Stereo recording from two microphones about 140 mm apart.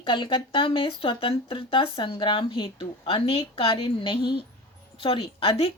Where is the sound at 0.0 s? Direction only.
35° left (ahead or behind).